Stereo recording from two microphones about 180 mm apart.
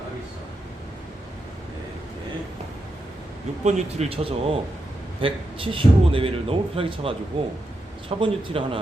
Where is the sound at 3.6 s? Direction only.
40° right (ahead or behind).